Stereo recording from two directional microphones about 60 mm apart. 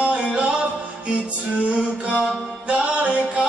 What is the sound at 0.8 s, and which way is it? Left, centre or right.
A capella, centre.